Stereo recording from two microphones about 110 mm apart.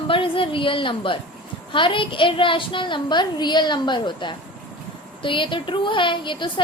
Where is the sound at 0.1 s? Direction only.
50° left (ahead or behind).